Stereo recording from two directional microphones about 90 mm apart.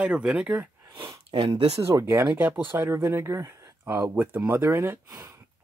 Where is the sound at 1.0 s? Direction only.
60° right (ahead or behind).